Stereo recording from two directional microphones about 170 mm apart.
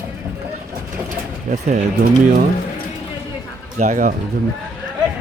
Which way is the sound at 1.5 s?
45° right (ahead or behind).